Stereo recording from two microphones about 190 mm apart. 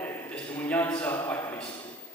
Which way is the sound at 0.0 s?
10° left (ahead or behind).